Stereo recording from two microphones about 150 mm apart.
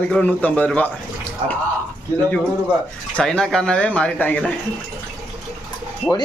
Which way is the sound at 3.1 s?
5° left (ahead or behind).